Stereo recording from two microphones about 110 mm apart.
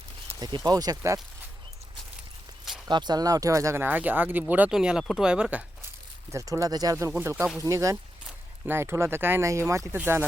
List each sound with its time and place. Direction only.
0.3 s speech: 40° right (ahead or behind)
2.8 s speech: 40° right (ahead or behind)
3.8 s speech: 15° right (ahead or behind)
6.3 s speech: 30° right (ahead or behind)
7.2 s speech: 25° right (ahead or behind)